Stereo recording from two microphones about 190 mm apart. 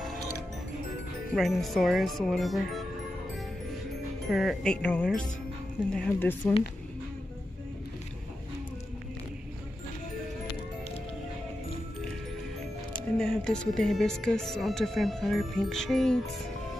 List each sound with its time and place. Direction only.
1.3 s speech: centre (ahead or behind)
4.3 s a woman's voice: centre (ahead or behind)
13.2 s speech: centre (ahead or behind)